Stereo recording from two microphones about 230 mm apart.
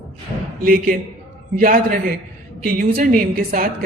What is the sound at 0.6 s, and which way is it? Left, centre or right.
Speech, right.